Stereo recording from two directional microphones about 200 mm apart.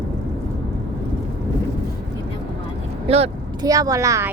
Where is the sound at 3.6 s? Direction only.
15° right (ahead or behind).